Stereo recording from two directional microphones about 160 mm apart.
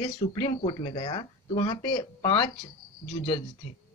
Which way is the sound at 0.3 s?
30° left (ahead or behind).